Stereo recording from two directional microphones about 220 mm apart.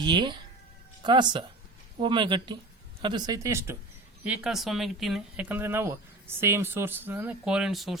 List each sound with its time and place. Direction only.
0.0 s speech: 20° right (ahead or behind); by 7.9 s centre (ahead or behind)